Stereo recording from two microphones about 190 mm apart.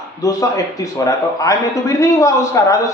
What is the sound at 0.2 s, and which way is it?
A man's voice, 20° left (ahead or behind).